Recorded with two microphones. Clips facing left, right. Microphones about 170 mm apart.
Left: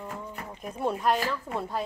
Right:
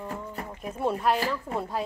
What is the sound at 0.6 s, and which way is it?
Speech, 5° right (ahead or behind).